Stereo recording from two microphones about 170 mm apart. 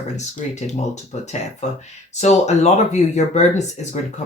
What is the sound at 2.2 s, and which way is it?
Speech, 40° left (ahead or behind).